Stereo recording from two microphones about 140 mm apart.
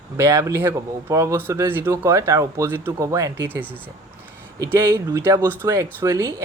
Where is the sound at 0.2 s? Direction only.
20° right (ahead or behind).